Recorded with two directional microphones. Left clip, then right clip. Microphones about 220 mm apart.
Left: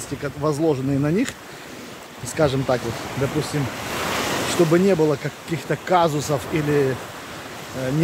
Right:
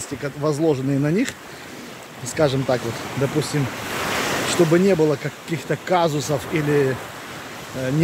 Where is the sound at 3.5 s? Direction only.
15° right (ahead or behind).